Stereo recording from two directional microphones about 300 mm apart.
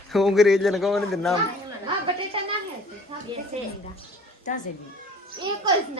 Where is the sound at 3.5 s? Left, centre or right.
Right.